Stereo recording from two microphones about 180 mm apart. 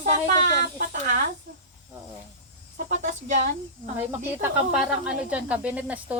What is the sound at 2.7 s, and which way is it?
Speech, 45° right (ahead or behind).